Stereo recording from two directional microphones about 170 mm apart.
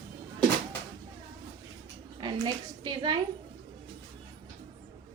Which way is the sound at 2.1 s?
25° right (ahead or behind).